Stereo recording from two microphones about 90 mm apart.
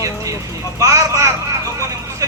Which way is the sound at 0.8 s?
35° right (ahead or behind).